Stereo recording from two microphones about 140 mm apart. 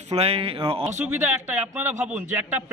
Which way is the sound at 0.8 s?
15° right (ahead or behind).